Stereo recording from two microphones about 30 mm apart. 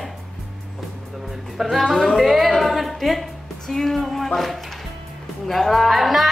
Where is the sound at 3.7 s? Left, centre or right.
Centre.